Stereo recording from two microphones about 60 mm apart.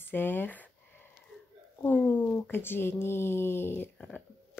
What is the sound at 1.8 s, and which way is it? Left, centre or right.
Speech, left.